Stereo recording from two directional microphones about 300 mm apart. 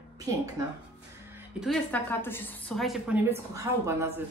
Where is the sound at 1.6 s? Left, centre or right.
Centre.